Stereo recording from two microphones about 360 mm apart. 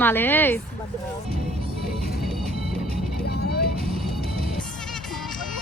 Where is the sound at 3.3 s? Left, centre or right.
Left.